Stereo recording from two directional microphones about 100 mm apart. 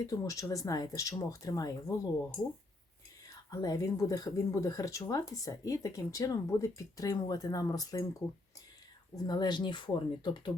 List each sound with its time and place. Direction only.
0.0 s speech: 35° left (ahead or behind)
3.2 s speech: 40° left (ahead or behind)
9.1 s speech: 40° left (ahead or behind)